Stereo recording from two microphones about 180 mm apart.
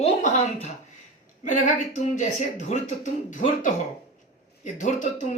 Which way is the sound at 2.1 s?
45° left (ahead or behind).